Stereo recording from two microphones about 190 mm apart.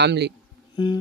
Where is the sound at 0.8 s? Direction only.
25° left (ahead or behind).